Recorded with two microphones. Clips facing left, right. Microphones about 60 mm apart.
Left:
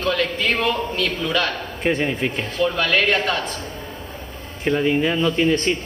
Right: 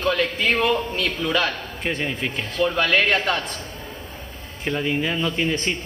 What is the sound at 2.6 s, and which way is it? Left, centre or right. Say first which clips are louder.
Speech: even; centre.